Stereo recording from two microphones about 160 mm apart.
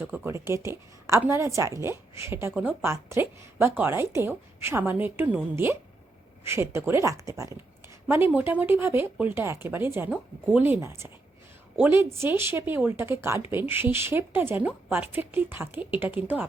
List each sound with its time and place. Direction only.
0.0 s a woman's voice: 15° right (ahead or behind)